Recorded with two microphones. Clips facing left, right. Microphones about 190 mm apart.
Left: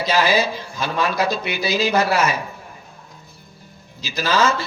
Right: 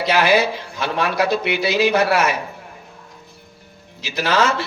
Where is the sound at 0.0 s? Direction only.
65° right (ahead or behind).